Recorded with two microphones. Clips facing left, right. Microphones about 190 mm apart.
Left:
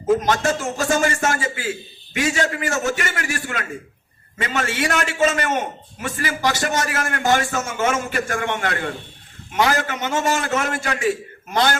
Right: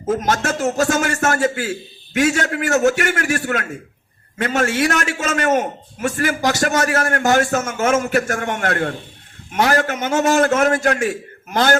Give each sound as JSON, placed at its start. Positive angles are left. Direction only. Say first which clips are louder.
{"t": 0.2, "sound": "a man's voice", "louder": "right 1 dB", "side_deg": -45}